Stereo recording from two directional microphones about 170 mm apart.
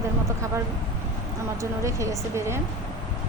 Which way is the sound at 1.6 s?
15° right (ahead or behind).